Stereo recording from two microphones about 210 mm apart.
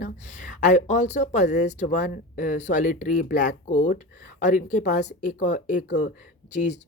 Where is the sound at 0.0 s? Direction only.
35° left (ahead or behind).